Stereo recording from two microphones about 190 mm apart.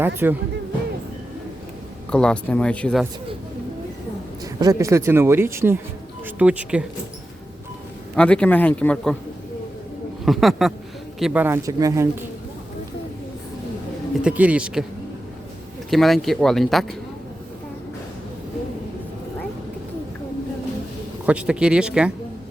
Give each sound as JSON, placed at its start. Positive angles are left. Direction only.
{"t": 0.0, "sound": "speech", "side_deg": -10}
{"t": 2.0, "sound": "speech", "side_deg": 5}
{"t": 4.6, "sound": "speech", "side_deg": -15}
{"t": 8.1, "sound": "speech", "side_deg": 5}
{"t": 10.2, "sound": "speech", "side_deg": 0}
{"t": 14.2, "sound": "speech", "side_deg": -5}
{"t": 15.9, "sound": "speech", "side_deg": 0}
{"t": 21.2, "sound": "speech", "side_deg": -5}